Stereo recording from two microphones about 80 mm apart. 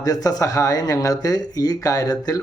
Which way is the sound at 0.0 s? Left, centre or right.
Left.